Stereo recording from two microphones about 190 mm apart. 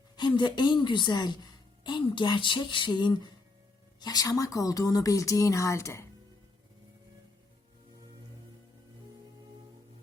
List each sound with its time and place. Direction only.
0.2 s a woman's voice: 25° left (ahead or behind)